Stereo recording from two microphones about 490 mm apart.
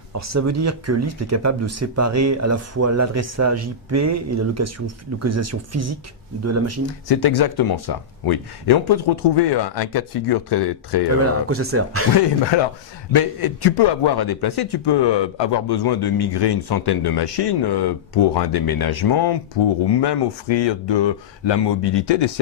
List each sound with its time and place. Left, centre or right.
0.2 s speech: right
7.1 s speech: left
11.4 s speech: right
13.1 s speech: left